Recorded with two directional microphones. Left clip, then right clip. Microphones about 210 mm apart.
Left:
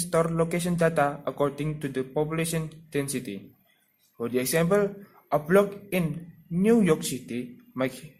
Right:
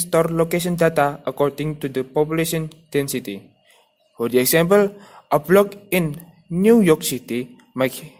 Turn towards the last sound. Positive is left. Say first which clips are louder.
# right 8 dB
turn(degrees=-40)  # may be behind; listen again after turning